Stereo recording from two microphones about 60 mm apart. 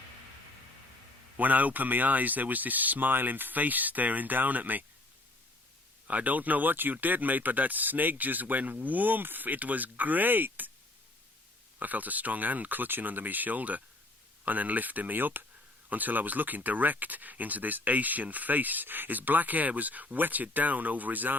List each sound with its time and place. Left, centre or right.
1.4 s speech: right
6.1 s speech: right
11.8 s speech: right